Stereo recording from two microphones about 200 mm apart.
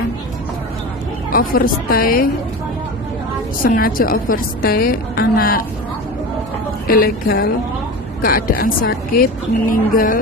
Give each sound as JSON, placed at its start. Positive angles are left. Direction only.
{"t": 1.3, "sound": "a woman's voice", "side_deg": 45}
{"t": 3.6, "sound": "a woman's voice", "side_deg": 45}
{"t": 6.8, "sound": "a woman's voice", "side_deg": 45}